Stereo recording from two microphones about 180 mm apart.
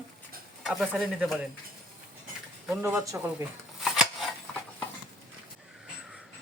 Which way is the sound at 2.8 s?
15° right (ahead or behind).